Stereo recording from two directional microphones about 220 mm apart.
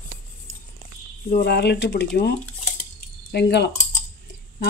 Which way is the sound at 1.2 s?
50° left (ahead or behind).